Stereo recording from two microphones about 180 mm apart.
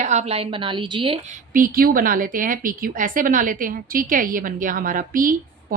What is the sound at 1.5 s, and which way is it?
A woman's voice, 50° right (ahead or behind).